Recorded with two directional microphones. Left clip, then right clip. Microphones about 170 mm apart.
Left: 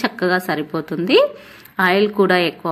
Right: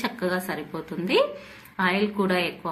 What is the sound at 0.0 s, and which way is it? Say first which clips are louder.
A woman's voice: left 9 dB; 40° left (ahead or behind).